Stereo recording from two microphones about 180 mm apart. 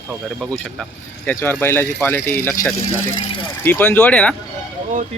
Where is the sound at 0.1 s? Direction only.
Centre (ahead or behind).